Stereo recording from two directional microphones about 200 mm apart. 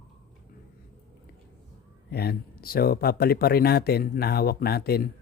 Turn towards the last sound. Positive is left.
turn(degrees=50)  # may be behind; listen again after turning